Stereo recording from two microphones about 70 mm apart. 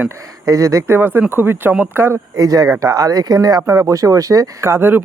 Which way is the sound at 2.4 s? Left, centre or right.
Right.